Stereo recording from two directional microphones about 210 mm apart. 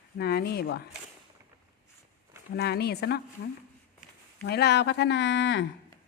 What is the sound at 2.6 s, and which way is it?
Speech, 50° left (ahead or behind).